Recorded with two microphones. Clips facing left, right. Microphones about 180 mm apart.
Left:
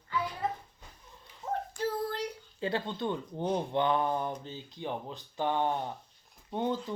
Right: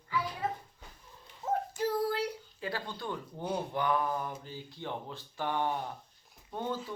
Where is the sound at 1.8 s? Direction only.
10° right (ahead or behind).